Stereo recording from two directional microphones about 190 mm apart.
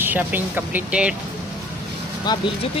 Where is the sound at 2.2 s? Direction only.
25° left (ahead or behind).